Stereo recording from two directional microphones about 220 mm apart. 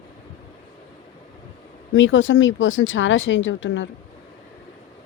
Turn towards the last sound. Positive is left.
turn(degrees=55)  # may be behind; listen again after turning